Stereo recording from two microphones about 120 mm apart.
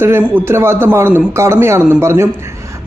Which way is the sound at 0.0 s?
20° right (ahead or behind).